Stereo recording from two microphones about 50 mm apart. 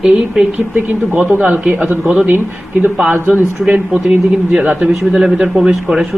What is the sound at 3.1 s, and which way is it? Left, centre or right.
Speech, right.